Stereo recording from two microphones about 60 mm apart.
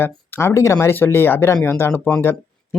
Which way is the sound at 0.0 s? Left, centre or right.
Left.